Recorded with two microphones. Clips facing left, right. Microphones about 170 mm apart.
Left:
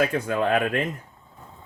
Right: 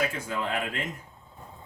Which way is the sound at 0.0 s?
60° left (ahead or behind).